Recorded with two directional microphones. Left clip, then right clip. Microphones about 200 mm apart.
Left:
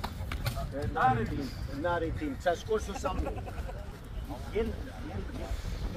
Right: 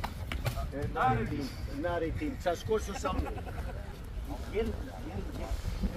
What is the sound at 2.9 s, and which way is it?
Speech, 25° right (ahead or behind).